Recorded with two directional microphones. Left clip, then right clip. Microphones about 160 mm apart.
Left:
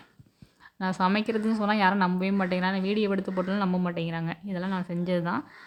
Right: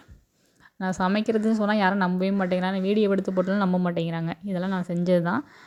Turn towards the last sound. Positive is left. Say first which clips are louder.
# right 5 dB
turn(degrees=-45)  # may be behind; listen again after turning